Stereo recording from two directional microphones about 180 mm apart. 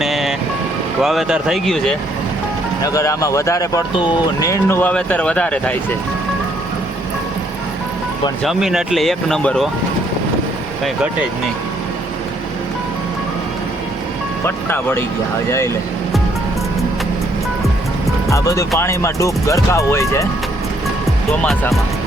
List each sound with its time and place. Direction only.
0.0 s music: centre (ahead or behind)
1.0 s speech: centre (ahead or behind)
2.8 s speech: 20° left (ahead or behind)
8.4 s speech: centre (ahead or behind)
10.8 s speech: 5° right (ahead or behind)
14.4 s speech: 10° left (ahead or behind)
18.3 s speech: 15° left (ahead or behind)
21.4 s speech: centre (ahead or behind)